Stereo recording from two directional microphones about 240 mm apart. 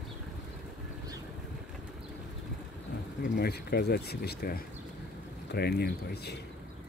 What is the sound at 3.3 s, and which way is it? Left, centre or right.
Speech, left.